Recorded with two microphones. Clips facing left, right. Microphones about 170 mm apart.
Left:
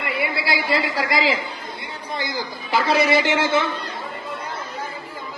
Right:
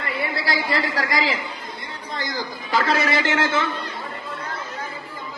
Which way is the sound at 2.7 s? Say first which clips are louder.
Left 3 dB; 15° left (ahead or behind).